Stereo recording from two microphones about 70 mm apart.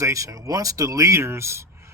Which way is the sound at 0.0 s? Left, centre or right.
Right.